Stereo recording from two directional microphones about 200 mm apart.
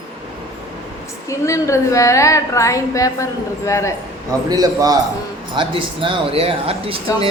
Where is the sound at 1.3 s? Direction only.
15° left (ahead or behind).